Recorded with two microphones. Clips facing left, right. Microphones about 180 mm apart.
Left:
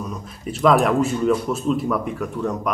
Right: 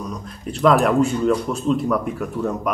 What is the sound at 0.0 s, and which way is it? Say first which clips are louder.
Speech: even; 5° left (ahead or behind).